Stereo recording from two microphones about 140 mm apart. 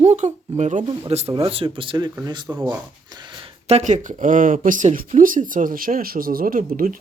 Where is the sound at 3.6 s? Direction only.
55° right (ahead or behind); by 7.0 s 90° right.